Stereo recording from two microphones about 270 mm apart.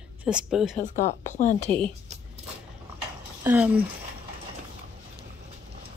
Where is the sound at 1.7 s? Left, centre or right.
Centre.